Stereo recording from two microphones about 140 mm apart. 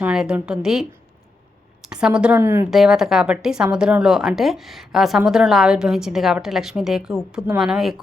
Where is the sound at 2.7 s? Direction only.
5° right (ahead or behind).